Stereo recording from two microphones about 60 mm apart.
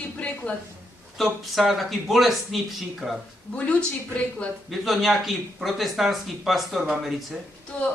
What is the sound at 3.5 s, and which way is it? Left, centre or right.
Speech, left.